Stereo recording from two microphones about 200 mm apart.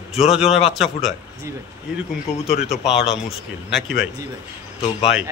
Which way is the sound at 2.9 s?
60° left (ahead or behind).